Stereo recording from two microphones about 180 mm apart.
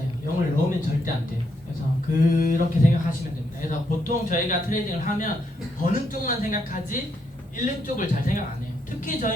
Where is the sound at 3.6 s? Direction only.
45° left (ahead or behind).